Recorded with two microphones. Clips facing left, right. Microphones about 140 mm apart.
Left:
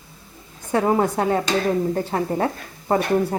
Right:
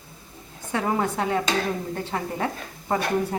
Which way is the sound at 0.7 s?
35° left (ahead or behind).